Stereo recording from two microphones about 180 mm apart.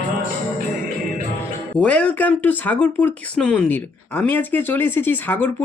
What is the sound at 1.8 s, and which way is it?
Speech, 5° left (ahead or behind).